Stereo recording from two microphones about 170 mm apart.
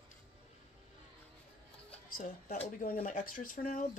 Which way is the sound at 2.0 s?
55° left (ahead or behind).